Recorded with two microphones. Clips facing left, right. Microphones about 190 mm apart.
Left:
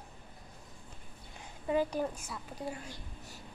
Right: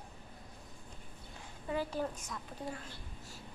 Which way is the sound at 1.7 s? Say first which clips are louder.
Left 5 dB; 20° left (ahead or behind).